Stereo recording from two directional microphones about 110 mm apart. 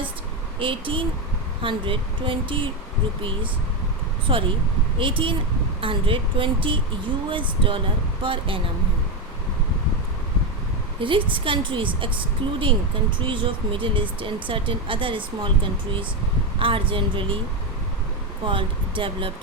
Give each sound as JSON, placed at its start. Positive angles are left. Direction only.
{"t": 0.6, "sound": "speech", "side_deg": -50}
{"t": 4.3, "sound": "speech", "side_deg": -55}
{"t": 11.0, "sound": "speech", "side_deg": -50}
{"t": 16.6, "sound": "speech", "side_deg": -55}
{"t": 18.4, "sound": "speech", "side_deg": -50}